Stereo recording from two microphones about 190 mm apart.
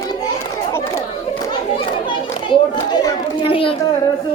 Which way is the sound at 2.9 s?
25° left (ahead or behind).